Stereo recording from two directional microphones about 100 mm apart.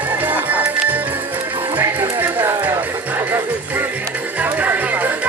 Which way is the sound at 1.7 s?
20° right (ahead or behind).